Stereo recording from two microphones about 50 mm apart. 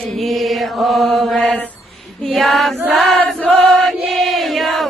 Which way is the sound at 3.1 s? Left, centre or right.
Centre.